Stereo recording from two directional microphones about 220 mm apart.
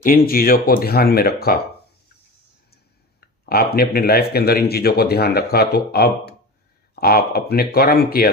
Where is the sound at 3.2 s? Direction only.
45° left (ahead or behind).